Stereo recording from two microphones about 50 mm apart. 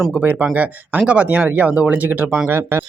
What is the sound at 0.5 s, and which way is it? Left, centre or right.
Speech, right.